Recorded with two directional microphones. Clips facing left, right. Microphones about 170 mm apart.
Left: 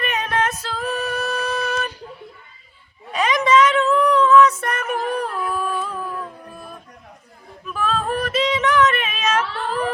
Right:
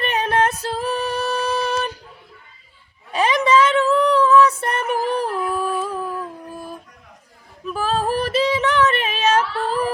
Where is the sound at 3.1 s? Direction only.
30° right (ahead or behind).